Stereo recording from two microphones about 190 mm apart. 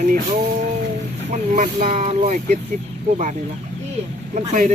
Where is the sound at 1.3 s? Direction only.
40° right (ahead or behind).